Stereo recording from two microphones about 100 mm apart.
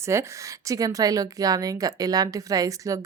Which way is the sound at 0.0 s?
30° right (ahead or behind).